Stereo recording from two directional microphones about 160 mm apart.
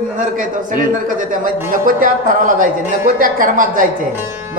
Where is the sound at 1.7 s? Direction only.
60° right (ahead or behind).